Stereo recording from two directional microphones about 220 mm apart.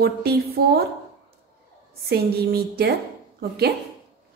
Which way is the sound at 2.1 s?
45° right (ahead or behind).